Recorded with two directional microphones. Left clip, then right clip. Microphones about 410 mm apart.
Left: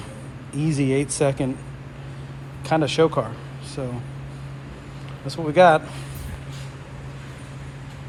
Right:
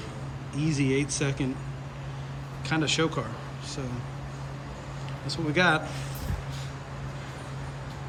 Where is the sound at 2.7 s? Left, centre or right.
Centre.